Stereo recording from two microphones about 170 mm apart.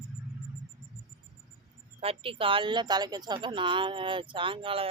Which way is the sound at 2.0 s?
35° right (ahead or behind).